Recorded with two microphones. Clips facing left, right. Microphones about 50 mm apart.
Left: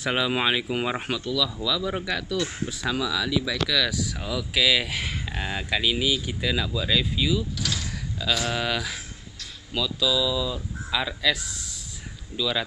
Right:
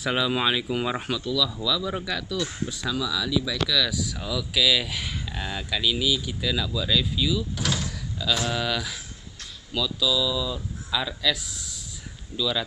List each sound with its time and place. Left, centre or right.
0.1 s speech: left
7.5 s speech: right
7.9 s a sound: left
8.5 s speech: left
12.4 s speech: centre